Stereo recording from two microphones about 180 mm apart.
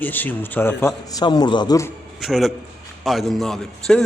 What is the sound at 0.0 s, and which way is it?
Speech, 10° left (ahead or behind).